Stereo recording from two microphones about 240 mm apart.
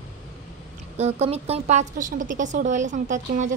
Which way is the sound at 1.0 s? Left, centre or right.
Right.